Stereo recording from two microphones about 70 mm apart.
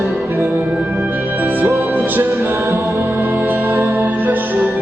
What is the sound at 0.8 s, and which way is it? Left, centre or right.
Music, right.